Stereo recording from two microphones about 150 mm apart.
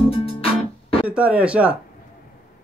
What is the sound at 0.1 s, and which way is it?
Music, 40° left (ahead or behind).